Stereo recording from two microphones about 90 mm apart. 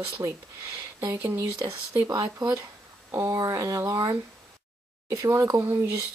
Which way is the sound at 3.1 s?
30° right (ahead or behind).